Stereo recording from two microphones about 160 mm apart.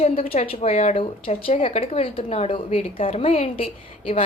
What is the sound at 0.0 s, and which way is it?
A woman's voice, 45° left (ahead or behind).